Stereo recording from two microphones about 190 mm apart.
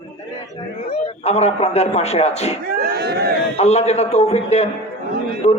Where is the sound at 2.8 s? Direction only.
55° right (ahead or behind).